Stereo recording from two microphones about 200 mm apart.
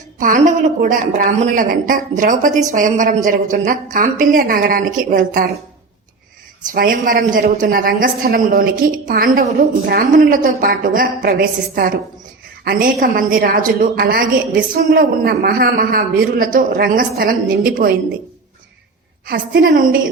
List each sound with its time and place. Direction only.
0.2 s a woman's voice: 40° right (ahead or behind)
6.7 s a woman's voice: 45° right (ahead or behind)
19.3 s a woman's voice: 50° right (ahead or behind)